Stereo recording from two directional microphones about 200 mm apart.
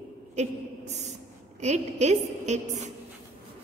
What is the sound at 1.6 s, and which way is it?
A woman's voice, 35° right (ahead or behind).